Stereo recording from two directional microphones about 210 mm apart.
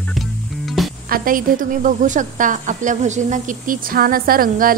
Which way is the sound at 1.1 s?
40° right (ahead or behind).